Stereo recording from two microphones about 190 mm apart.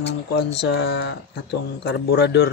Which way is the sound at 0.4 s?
60° left (ahead or behind).